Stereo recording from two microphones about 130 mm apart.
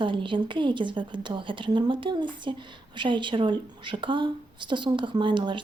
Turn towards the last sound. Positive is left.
turn(degrees=-35)  # may be behind; listen again after turning